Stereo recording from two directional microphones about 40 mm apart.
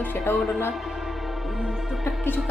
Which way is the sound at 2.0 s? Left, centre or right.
Left.